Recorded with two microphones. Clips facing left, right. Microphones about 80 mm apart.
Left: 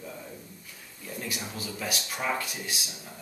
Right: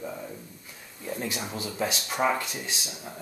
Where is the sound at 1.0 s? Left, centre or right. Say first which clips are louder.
Right 4 dB; right.